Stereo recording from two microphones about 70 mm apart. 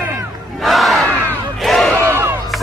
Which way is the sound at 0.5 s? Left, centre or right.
Centre.